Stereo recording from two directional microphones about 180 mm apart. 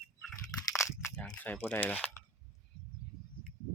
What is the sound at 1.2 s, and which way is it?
Speech, 10° left (ahead or behind).